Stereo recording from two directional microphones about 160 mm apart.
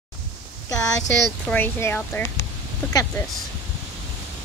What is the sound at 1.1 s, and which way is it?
Speech, 10° left (ahead or behind).